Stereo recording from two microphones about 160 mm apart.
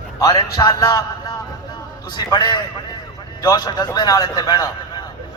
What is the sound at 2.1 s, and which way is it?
A man's voice, 25° left (ahead or behind).